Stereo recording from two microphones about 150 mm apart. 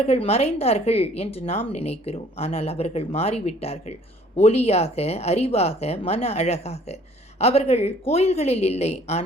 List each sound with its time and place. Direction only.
0.0 s a woman's voice: 45° left (ahead or behind)